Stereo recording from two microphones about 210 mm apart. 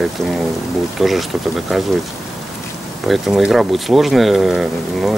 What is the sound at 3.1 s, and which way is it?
Speech, centre (ahead or behind).